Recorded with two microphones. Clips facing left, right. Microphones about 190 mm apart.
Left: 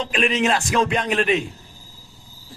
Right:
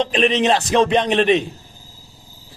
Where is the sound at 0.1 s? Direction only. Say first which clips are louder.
Right 4 dB; 20° right (ahead or behind).